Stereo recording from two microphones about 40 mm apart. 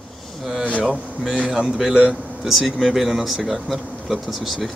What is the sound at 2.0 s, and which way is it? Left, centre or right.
Speech, centre.